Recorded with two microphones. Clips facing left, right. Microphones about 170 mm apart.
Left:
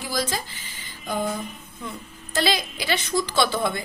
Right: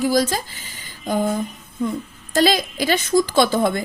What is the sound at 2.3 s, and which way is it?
A woman's voice, 45° right (ahead or behind).